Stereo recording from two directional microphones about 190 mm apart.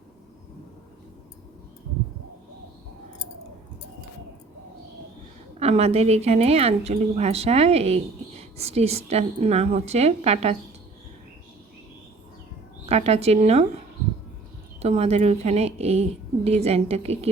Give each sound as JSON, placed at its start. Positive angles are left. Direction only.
{"t": 5.5, "sound": "a woman's voice", "side_deg": -35}
{"t": 12.8, "sound": "a woman's voice", "side_deg": -35}
{"t": 14.8, "sound": "a woman's voice", "side_deg": -35}